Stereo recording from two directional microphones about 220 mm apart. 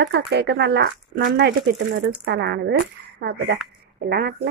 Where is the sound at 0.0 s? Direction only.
50° right (ahead or behind).